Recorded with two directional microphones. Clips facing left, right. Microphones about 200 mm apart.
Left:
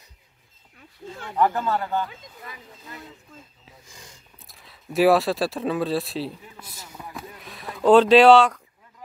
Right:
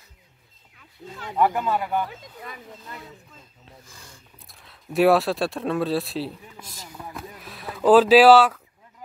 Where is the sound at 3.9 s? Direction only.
15° left (ahead or behind).